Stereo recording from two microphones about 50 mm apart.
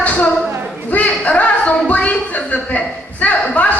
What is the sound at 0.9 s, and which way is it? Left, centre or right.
A woman's voice, left.